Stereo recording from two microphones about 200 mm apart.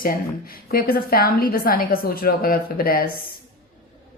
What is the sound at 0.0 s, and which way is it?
A woman's voice, 45° left (ahead or behind).